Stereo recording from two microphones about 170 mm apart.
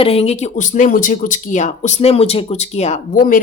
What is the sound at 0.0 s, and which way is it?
Speech, 35° left (ahead or behind).